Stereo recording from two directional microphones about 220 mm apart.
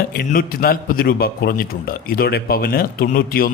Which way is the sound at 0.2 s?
40° left (ahead or behind).